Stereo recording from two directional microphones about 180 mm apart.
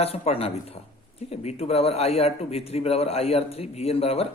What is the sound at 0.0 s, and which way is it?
Speech, 35° left (ahead or behind).